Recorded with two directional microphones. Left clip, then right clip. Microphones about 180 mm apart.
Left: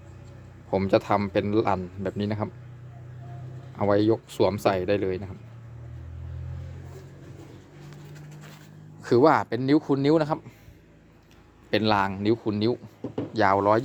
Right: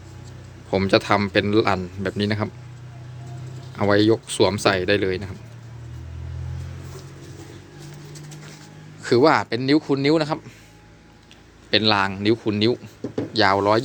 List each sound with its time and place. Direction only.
0.7 s a man's voice: 5° left (ahead or behind)
3.8 s a man's voice: 5° left (ahead or behind)
9.0 s a man's voice: 20° left (ahead or behind)
11.7 s a man's voice: 25° left (ahead or behind)